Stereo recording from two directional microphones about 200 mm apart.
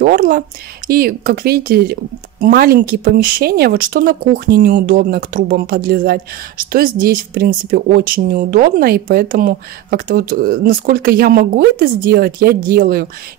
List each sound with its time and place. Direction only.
0.0 s speech: 45° right (ahead or behind)